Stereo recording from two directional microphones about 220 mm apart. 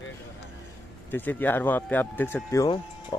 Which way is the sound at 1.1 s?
10° left (ahead or behind).